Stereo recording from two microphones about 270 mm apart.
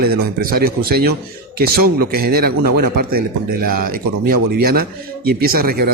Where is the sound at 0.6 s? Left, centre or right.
Right.